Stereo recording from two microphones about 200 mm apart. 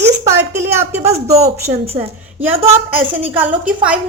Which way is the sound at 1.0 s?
35° right (ahead or behind).